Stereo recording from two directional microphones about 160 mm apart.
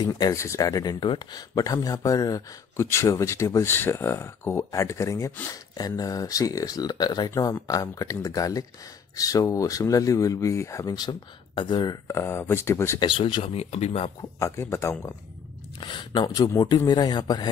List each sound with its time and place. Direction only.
0.0 s speech: 20° left (ahead or behind)
13.0 s speech: 30° left (ahead or behind)
14.4 s speech: 15° left (ahead or behind)
15.8 s speech: 25° left (ahead or behind)